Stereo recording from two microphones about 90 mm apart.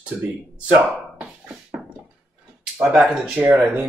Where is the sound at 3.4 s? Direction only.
20° right (ahead or behind).